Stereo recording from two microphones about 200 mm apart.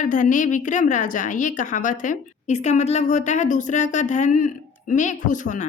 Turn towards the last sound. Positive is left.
turn(degrees=40)  # may be behind; listen again after turning